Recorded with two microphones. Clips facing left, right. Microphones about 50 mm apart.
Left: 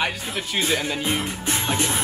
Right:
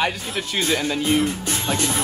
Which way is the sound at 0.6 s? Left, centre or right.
Centre.